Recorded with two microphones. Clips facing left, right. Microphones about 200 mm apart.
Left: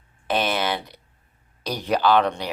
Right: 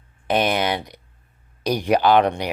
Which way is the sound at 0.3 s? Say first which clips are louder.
Right 3 dB; 15° right (ahead or behind).